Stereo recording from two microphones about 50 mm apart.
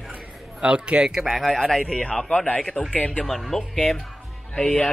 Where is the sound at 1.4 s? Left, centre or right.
Centre.